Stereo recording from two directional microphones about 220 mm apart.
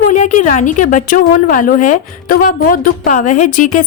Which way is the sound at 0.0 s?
35° left (ahead or behind).